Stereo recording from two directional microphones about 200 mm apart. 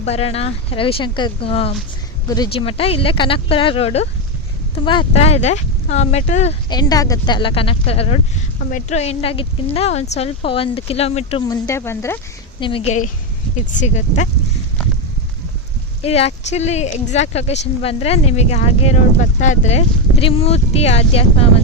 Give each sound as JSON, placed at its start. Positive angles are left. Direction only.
{"t": 0.0, "sound": "speech", "side_deg": 30}
{"t": 6.7, "sound": "speech", "side_deg": 20}
{"t": 11.4, "sound": "speech", "side_deg": 20}
{"t": 12.5, "sound": "speech", "side_deg": 25}
{"t": 16.0, "sound": "speech", "side_deg": 30}